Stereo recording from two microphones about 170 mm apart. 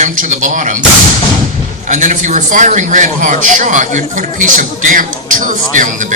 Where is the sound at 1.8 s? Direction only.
45° right (ahead or behind).